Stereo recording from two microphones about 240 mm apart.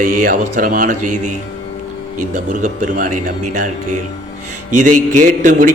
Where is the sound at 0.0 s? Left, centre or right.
Right.